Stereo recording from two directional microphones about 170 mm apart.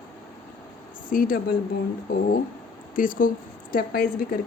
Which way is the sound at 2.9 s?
55° left (ahead or behind).